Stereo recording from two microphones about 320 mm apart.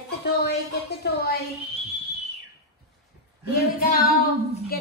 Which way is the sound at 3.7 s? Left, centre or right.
Left.